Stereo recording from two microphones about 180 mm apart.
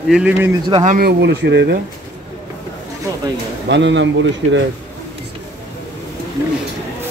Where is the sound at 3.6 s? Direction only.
85° right.